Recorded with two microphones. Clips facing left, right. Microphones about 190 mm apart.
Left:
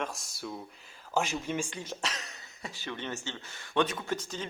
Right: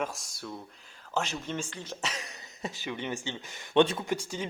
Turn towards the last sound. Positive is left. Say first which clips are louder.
# right 2 dB
turn(degrees=-10)  # may be behind; listen again after turning